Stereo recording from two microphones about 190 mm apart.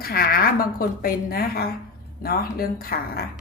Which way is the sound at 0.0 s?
55° left (ahead or behind).